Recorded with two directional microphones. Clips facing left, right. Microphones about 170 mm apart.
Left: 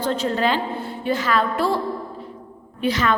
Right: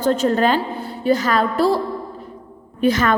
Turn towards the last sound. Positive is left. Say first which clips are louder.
# right 4 dB
turn(degrees=-45)  # may be behind; listen again after turning